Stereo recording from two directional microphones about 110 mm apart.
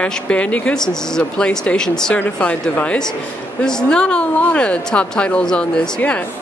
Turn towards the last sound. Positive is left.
turn(degrees=10)  # may be behind; listen again after turning